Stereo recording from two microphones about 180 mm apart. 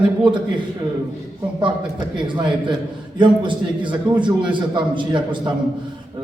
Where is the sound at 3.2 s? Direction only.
25° right (ahead or behind).